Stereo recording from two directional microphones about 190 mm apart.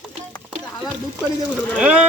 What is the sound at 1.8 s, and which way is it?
Speech, 5° right (ahead or behind).